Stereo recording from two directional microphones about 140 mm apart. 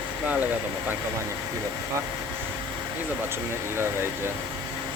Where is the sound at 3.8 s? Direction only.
20° right (ahead or behind).